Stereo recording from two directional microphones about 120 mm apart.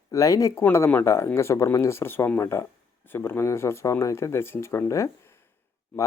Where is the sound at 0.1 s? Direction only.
25° left (ahead or behind).